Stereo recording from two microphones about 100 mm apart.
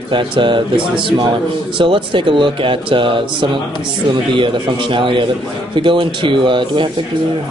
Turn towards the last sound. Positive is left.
turn(degrees=-55)  # may be behind; listen again after turning